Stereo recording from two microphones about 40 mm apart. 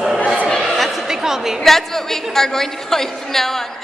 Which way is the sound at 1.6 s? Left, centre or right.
Centre.